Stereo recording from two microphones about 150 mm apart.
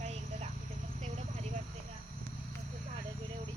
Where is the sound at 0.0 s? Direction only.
45° right (ahead or behind).